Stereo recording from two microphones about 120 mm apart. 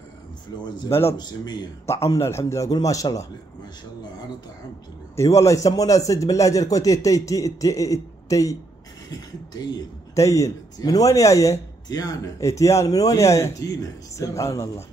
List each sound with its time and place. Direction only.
0.8 s speech: 20° left (ahead or behind)
1.1 s speech: 35° left (ahead or behind)
1.9 s speech: 25° left (ahead or behind)
5.1 s speech: 25° left (ahead or behind)